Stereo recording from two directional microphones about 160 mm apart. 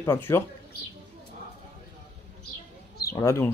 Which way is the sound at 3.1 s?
15° left (ahead or behind).